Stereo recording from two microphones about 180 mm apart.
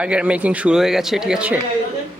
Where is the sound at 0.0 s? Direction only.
5° right (ahead or behind).